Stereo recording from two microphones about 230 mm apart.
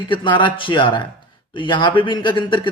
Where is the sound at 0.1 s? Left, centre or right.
Left.